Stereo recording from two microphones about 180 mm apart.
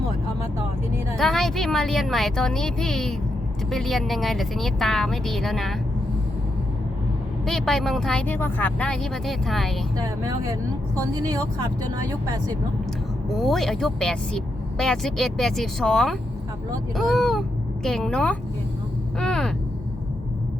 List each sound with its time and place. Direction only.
1.1 s speech: centre (ahead or behind)
7.4 s speech: centre (ahead or behind)
10.2 s speech: 15° right (ahead or behind)
13.3 s speech: centre (ahead or behind)